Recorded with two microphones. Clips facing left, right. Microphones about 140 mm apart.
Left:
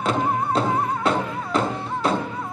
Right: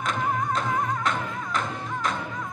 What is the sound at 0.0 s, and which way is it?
Music, 30° left (ahead or behind).